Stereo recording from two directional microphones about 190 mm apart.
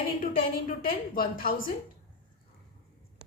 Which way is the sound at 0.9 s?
50° left (ahead or behind).